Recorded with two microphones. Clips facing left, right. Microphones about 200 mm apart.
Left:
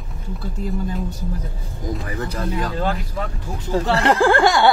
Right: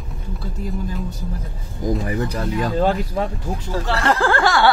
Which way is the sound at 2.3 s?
15° right (ahead or behind).